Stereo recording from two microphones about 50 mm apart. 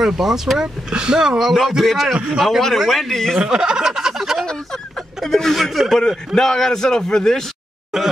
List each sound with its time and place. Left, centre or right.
0.0 s speech: centre
1.8 s a man's voice: centre
3.4 s a sound: centre
5.2 s speech: centre
5.9 s a man's voice: centre
7.9 s speech: centre